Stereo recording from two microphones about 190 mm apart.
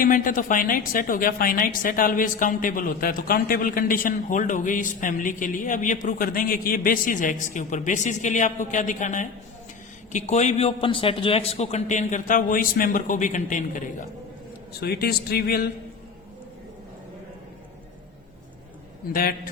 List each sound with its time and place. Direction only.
0.0 s a woman's voice: 45° left (ahead or behind)
14.8 s speech: 55° left (ahead or behind)
19.1 s a woman's voice: 50° left (ahead or behind)